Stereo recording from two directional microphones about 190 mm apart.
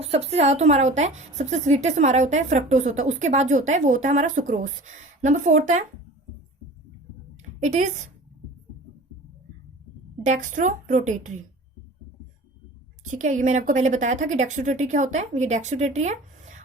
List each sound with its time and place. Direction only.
0.0 s a woman's voice: 30° right (ahead or behind)
7.6 s a woman's voice: 40° right (ahead or behind)
10.2 s a woman's voice: 40° right (ahead or behind)
13.1 s a woman's voice: 40° right (ahead or behind)